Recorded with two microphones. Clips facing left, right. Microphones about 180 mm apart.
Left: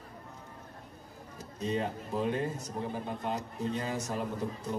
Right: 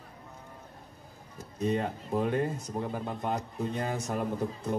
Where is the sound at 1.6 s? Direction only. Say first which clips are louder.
Right 3 dB; 55° right (ahead or behind).